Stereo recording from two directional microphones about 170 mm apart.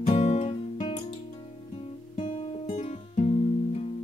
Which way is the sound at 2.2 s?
30° left (ahead or behind).